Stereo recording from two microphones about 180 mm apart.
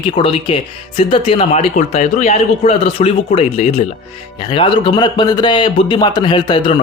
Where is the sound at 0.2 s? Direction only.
30° left (ahead or behind).